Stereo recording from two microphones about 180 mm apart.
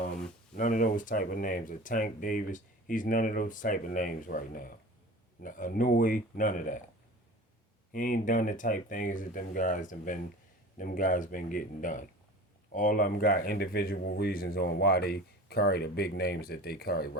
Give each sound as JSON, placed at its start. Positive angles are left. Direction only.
{"t": 0.5, "sound": "speech", "side_deg": 45}
{"t": 7.9, "sound": "speech", "side_deg": 45}